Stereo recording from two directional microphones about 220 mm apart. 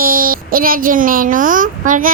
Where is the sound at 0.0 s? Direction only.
40° right (ahead or behind).